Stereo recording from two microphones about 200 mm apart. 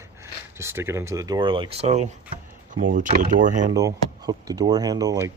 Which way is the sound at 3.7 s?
15° right (ahead or behind).